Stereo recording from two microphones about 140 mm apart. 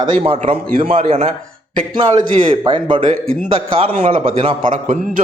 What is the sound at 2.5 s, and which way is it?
A man's voice, 35° right (ahead or behind).